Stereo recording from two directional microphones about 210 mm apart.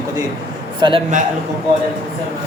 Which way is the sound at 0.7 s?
25° right (ahead or behind).